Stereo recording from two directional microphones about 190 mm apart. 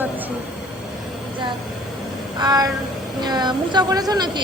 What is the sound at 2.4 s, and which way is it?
A woman's voice, 20° right (ahead or behind).